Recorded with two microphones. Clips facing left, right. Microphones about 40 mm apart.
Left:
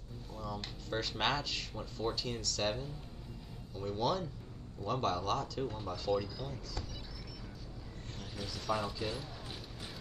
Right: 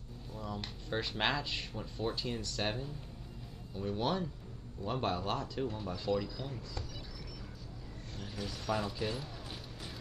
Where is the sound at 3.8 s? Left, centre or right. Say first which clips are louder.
Even; centre.